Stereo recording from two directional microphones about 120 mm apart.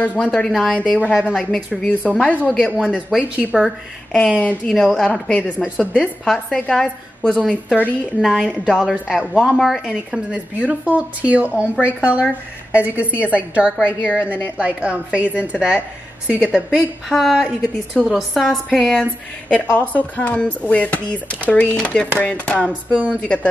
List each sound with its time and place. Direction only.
0.0 s a woman's voice: 10° left (ahead or behind)
4.4 s speech: 10° left (ahead or behind)
4.7 s a woman's voice: centre (ahead or behind)
8.2 s a woman's voice: centre (ahead or behind)
14.2 s speech: 20° left (ahead or behind)
14.6 s a woman's voice: 10° right (ahead or behind)
17.1 s a woman's voice: 5° left (ahead or behind)